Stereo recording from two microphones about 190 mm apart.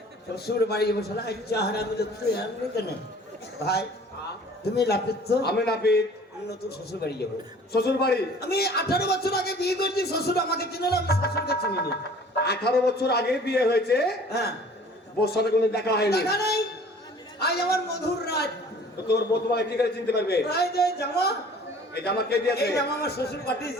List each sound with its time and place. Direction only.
0.3 s a man's voice: 55° left (ahead or behind)
4.7 s a man's voice: 60° left (ahead or behind)